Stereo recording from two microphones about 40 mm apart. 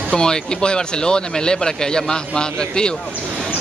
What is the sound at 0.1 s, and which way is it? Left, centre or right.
Speech, left.